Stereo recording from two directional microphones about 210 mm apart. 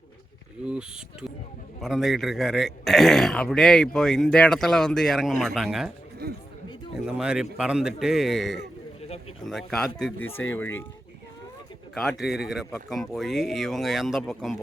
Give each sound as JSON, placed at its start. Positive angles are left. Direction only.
{"t": 0.6, "sound": "speech", "side_deg": -5}
{"t": 6.2, "sound": "speech", "side_deg": -50}
{"t": 7.0, "sound": "speech", "side_deg": -5}
{"t": 11.9, "sound": "speech", "side_deg": 0}